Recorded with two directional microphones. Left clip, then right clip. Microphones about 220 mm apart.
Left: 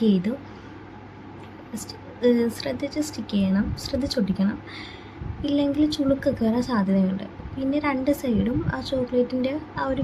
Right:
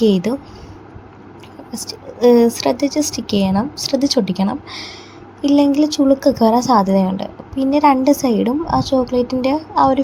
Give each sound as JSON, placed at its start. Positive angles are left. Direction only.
{"t": 0.0, "sound": "a woman's voice", "side_deg": -30}
{"t": 2.2, "sound": "a woman's voice", "side_deg": -30}